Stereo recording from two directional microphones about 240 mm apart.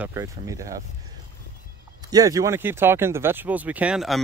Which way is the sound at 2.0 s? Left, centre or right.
Centre.